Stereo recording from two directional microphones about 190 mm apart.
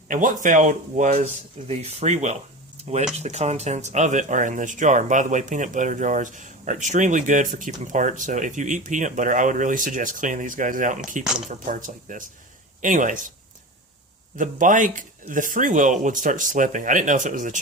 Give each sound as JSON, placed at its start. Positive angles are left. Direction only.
{"t": 0.1, "sound": "speech", "side_deg": -45}
{"t": 14.3, "sound": "speech", "side_deg": -45}